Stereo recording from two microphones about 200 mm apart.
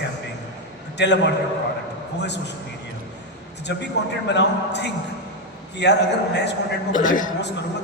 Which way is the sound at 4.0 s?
60° left (ahead or behind).